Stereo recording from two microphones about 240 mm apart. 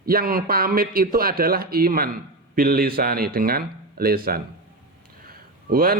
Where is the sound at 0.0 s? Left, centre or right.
Right.